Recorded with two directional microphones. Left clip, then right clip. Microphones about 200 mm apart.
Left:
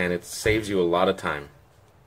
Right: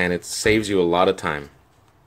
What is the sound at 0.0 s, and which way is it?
Speech, 40° right (ahead or behind).